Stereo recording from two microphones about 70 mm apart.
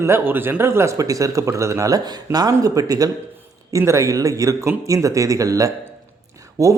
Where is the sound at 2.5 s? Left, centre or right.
Right.